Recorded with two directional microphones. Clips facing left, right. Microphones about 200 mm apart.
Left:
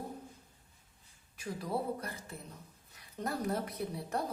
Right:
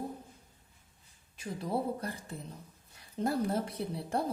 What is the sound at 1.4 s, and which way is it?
Speech, 25° right (ahead or behind).